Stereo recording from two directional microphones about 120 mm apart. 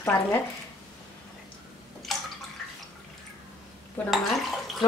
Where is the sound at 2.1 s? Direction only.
Centre (ahead or behind).